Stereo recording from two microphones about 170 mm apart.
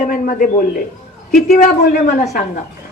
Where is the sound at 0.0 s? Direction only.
55° left (ahead or behind).